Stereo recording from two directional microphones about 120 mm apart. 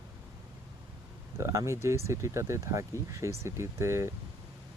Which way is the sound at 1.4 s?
25° right (ahead or behind).